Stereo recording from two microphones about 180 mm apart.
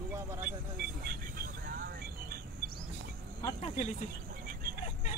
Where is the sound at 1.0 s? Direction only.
55° right (ahead or behind).